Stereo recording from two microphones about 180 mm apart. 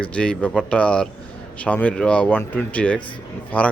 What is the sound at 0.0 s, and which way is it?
Speech, 5° left (ahead or behind).